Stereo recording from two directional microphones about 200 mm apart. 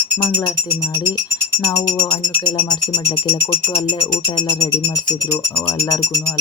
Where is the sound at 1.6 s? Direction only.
15° left (ahead or behind).